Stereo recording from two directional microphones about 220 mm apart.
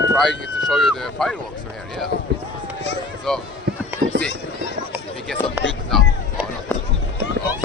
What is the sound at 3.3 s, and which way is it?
Speech, centre (ahead or behind).